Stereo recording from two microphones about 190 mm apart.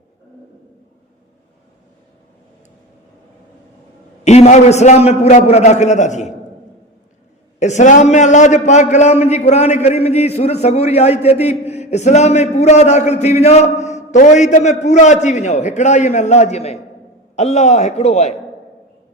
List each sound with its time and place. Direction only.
4.2 s a man's voice: 35° left (ahead or behind)
7.6 s a man's voice: 40° left (ahead or behind)